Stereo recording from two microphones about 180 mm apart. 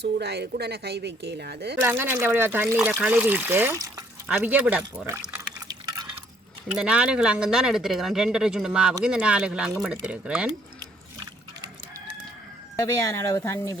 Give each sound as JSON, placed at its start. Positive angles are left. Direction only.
{"t": 0.0, "sound": "speech", "side_deg": -65}
{"t": 1.8, "sound": "speech", "side_deg": -10}
{"t": 6.7, "sound": "speech", "side_deg": -5}
{"t": 12.7, "sound": "speech", "side_deg": 20}